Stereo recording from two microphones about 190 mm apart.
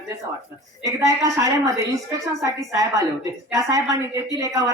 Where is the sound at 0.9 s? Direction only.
15° right (ahead or behind).